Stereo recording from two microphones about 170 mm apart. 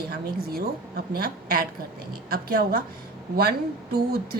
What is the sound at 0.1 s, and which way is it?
A woman's voice, 65° right (ahead or behind).